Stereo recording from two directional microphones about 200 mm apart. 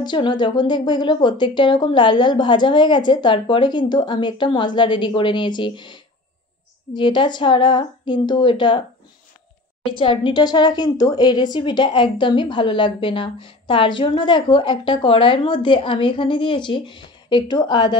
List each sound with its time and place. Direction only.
0.0 s a woman's voice: 25° left (ahead or behind)
9.9 s a woman's voice: 25° left (ahead or behind)